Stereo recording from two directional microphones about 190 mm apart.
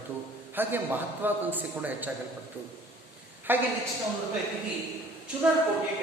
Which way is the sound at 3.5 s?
10° right (ahead or behind).